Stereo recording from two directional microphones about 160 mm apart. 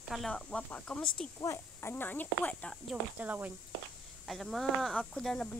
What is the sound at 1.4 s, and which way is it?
Speech, 15° left (ahead or behind).